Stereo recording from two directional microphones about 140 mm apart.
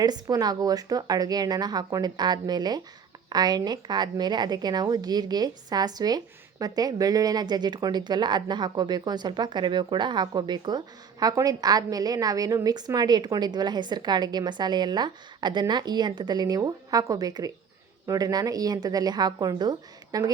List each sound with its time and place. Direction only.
0.0 s a woman's voice: 30° right (ahead or behind)